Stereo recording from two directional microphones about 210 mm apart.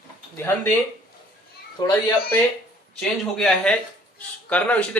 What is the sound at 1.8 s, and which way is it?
Speech, 20° left (ahead or behind).